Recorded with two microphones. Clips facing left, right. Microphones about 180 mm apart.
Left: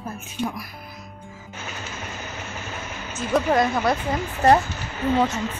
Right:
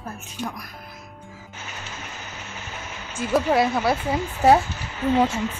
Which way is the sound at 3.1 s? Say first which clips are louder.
Even; 5° right (ahead or behind).